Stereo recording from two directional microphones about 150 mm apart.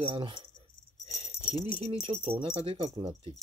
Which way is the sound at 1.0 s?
45° right (ahead or behind).